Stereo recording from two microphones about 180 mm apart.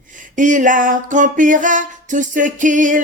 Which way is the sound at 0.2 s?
45° right (ahead or behind).